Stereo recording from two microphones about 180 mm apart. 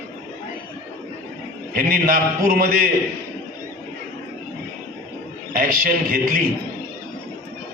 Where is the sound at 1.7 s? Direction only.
50° right (ahead or behind).